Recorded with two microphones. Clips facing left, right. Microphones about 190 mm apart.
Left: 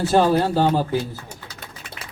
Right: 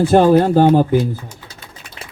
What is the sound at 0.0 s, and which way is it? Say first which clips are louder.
Speech: right 6 dB; 55° right (ahead or behind).